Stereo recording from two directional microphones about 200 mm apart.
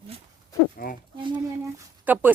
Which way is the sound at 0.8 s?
45° left (ahead or behind).